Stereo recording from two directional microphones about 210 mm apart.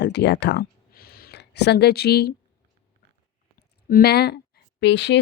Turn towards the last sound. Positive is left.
turn(degrees=55)  # may be behind; listen again after turning